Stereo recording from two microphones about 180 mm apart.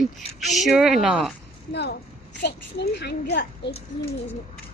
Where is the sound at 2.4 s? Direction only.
65° left (ahead or behind).